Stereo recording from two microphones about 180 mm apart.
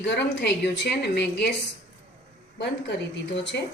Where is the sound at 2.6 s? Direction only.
75° left (ahead or behind).